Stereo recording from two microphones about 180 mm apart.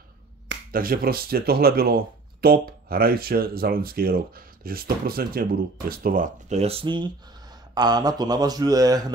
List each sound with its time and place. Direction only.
0.7 s speech: 55° right (ahead or behind)
6.6 s speech: 30° right (ahead or behind)